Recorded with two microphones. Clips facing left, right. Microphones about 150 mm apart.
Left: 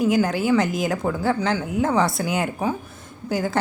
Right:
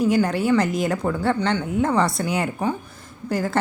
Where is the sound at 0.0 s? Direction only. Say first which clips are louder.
Even; centre (ahead or behind).